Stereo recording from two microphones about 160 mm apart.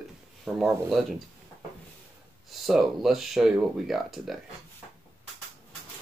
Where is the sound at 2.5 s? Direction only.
Centre (ahead or behind).